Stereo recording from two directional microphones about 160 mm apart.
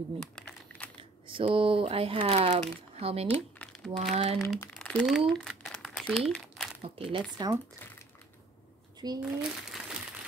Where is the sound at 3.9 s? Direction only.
40° right (ahead or behind).